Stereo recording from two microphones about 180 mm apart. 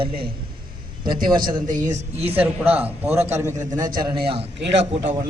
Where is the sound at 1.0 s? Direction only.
50° right (ahead or behind); by 2.4 s 35° right (ahead or behind).